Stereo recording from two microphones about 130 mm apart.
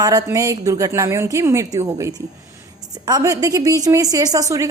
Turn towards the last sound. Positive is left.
turn(degrees=-25)  # may be behind; listen again after turning